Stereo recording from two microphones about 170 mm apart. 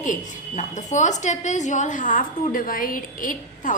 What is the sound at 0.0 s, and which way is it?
A woman's voice, 50° left (ahead or behind).